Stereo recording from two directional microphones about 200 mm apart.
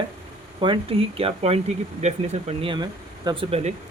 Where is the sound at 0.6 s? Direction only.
25° right (ahead or behind).